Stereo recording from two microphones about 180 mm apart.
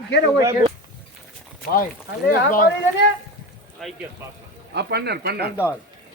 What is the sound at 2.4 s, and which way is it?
Speech, 55° left (ahead or behind).